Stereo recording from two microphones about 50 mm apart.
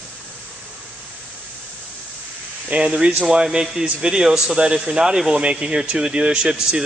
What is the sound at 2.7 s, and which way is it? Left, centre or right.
A man's voice, centre.